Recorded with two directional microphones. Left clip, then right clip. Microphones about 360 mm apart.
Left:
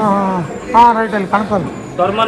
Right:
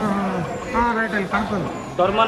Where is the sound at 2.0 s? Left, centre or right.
Centre.